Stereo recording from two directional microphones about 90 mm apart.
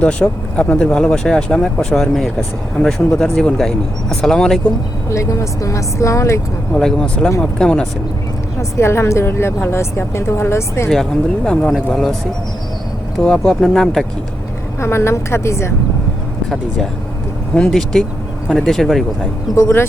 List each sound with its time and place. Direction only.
0.0 s speech: 15° left (ahead or behind)
5.0 s speech: 35° left (ahead or behind)
6.7 s speech: 10° left (ahead or behind)
8.7 s a woman's voice: 30° left (ahead or behind)
11.4 s speech: 10° left (ahead or behind)
13.1 s speech: 10° left (ahead or behind)
14.8 s a woman's voice: 30° left (ahead or behind)
16.5 s speech: 5° left (ahead or behind)
19.5 s a woman's voice: 25° left (ahead or behind)